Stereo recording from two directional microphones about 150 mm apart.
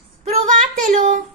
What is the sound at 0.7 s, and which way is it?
Child singing, 60° right (ahead or behind).